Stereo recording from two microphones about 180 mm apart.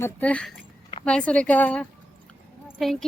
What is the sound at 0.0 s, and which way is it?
A woman's voice, 10° left (ahead or behind).